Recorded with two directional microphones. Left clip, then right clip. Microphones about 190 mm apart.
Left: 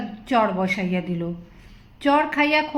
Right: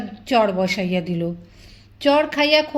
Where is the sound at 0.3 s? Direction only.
45° right (ahead or behind).